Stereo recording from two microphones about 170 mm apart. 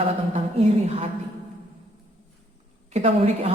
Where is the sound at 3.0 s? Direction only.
35° right (ahead or behind).